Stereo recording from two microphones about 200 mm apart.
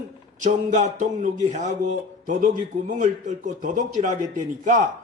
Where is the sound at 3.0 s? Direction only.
40° right (ahead or behind).